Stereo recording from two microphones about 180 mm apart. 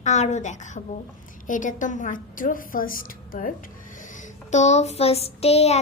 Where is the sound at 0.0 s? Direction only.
40° left (ahead or behind).